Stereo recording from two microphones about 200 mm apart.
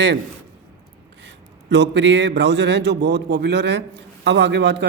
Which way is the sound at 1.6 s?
60° right (ahead or behind).